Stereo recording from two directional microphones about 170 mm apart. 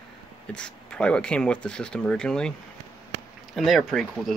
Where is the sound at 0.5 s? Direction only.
5° left (ahead or behind).